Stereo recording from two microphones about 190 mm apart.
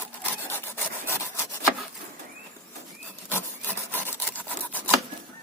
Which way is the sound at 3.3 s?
10° left (ahead or behind).